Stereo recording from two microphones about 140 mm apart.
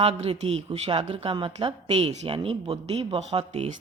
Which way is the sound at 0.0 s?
45° right (ahead or behind).